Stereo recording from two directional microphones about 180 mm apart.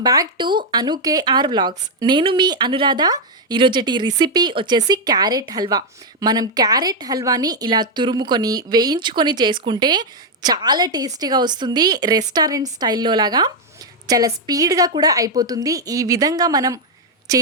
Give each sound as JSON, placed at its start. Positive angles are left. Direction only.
{"t": 0.0, "sound": "speech", "side_deg": -20}